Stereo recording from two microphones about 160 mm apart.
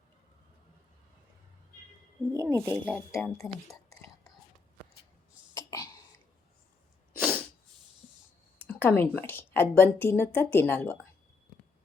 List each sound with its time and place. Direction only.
2.3 s speech: 20° right (ahead or behind)
2.8 s speech: 5° left (ahead or behind)
5.5 s cough: 20° left (ahead or behind)
7.2 s sneeze: 5° left (ahead or behind)
8.5 s a woman's voice: 10° left (ahead or behind)